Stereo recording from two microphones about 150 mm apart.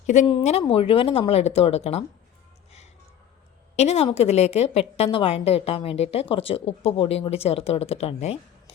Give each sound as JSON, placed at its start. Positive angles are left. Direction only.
{"t": 0.1, "sound": "a woman's voice", "side_deg": 50}
{"t": 0.7, "sound": "a woman's voice", "side_deg": 40}
{"t": 3.8, "sound": "a woman's voice", "side_deg": 45}